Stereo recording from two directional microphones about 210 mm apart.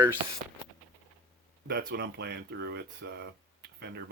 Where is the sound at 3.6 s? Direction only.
50° right (ahead or behind).